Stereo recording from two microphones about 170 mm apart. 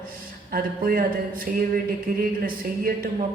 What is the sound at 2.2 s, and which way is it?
Speech, 55° right (ahead or behind).